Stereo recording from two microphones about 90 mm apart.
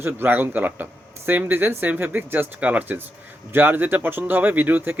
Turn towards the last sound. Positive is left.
turn(degrees=-20)  # may be behind; listen again after turning